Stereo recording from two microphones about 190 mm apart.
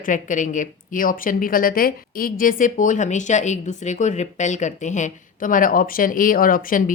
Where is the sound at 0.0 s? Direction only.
45° left (ahead or behind).